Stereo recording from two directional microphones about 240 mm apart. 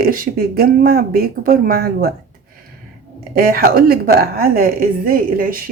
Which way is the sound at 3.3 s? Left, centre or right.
Right.